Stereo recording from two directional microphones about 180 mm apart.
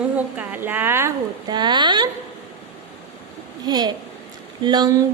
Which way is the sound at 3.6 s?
20° right (ahead or behind).